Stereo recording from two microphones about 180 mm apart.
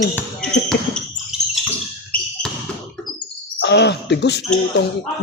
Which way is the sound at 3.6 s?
70° left (ahead or behind).